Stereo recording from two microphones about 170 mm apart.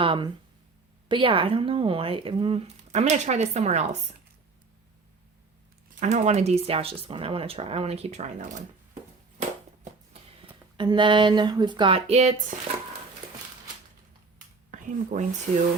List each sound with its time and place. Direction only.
0.0 s speech: 30° right (ahead or behind)
6.0 s speech: 45° right (ahead or behind)
10.8 s speech: 30° right (ahead or behind); by 12.5 s 45° right (ahead or behind)
14.7 s speech: 45° right (ahead or behind)